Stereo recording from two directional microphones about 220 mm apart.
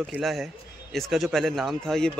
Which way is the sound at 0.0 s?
Centre (ahead or behind).